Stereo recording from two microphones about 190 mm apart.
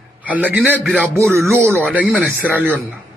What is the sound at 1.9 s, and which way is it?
Speech, 5° left (ahead or behind).